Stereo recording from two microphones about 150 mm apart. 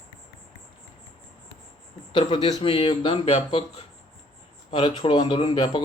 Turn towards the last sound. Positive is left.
turn(degrees=35)  # may be behind; listen again after turning